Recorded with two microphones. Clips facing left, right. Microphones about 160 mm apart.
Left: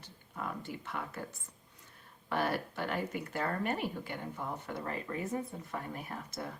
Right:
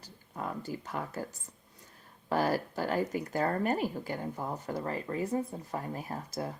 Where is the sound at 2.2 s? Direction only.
40° right (ahead or behind).